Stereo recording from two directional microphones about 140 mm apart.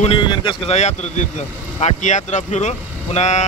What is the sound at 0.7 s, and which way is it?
Speech, 55° left (ahead or behind).